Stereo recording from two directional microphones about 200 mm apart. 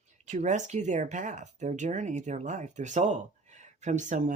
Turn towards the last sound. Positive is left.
turn(degrees=-35)  # may be behind; listen again after turning